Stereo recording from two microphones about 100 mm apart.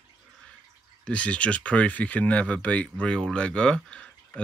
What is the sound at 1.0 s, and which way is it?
Speech, 10° left (ahead or behind).